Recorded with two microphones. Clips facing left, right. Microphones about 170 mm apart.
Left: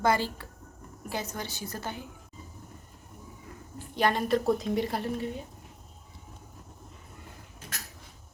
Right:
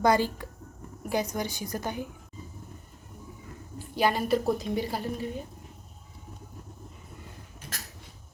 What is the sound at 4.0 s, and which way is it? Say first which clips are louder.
A woman's voice: right 1 dB; 5° right (ahead or behind).